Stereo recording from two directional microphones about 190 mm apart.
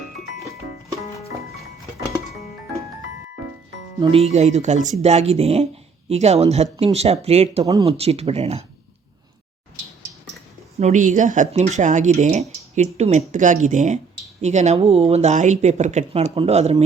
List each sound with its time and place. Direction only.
4.0 s speech: 30° right (ahead or behind)
7.6 s speech: 20° right (ahead or behind)
7.9 s speech: 30° right (ahead or behind)
10.8 s speech: 40° right (ahead or behind)